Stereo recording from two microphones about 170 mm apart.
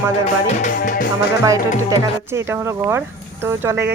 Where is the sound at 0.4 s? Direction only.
45° left (ahead or behind).